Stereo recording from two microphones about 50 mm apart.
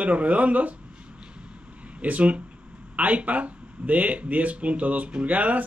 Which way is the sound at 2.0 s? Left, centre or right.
Right.